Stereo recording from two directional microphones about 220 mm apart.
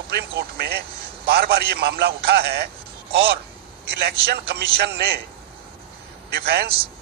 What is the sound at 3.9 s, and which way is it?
A man's voice, 45° right (ahead or behind).